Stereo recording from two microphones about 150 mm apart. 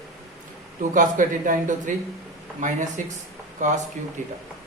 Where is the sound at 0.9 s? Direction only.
60° right (ahead or behind).